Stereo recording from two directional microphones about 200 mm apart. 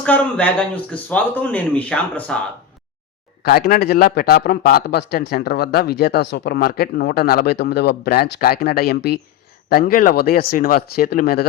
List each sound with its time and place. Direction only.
0.0 s speech: 5° left (ahead or behind)
3.4 s a man's voice: 50° left (ahead or behind)